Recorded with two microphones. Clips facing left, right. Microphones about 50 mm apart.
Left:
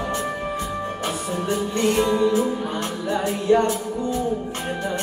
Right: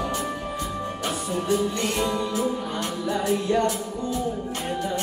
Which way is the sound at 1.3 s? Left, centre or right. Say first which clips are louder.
Right 2 dB; left.